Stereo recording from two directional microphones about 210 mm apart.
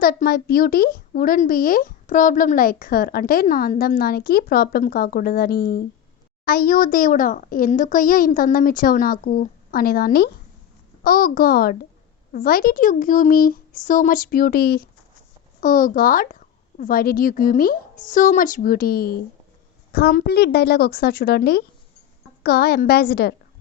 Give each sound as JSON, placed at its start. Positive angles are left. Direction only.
{"t": 0.0, "sound": "a child's voice", "side_deg": 45}